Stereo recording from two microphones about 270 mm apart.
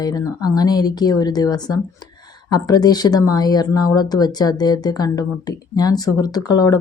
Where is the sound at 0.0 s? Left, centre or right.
Centre.